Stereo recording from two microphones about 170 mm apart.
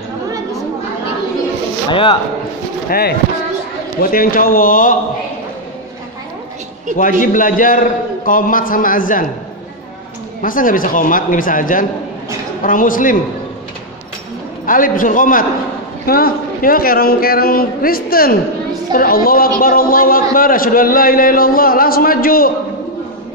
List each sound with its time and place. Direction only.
1.9 s a man's voice: 30° left (ahead or behind)
2.9 s a man's voice: 65° left (ahead or behind)
7.0 s a man's voice: 50° left (ahead or behind)
10.4 s a man's voice: 55° left (ahead or behind)
14.7 s a man's voice: 50° left (ahead or behind)